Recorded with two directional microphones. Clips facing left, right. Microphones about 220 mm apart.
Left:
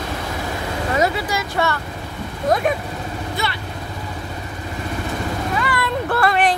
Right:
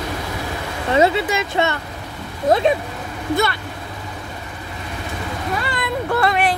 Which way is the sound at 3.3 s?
45° right (ahead or behind).